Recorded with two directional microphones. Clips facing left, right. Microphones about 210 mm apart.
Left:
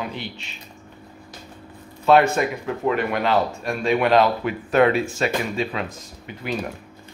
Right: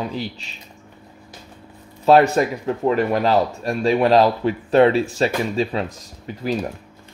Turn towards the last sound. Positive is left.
turn(degrees=-35)  # may be behind; listen again after turning